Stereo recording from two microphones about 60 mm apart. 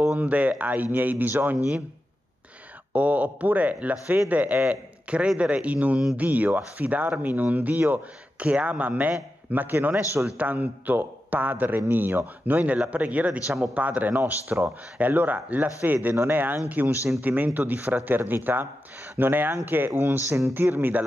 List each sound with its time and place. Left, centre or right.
0.1 s speech: right
2.9 s speech: right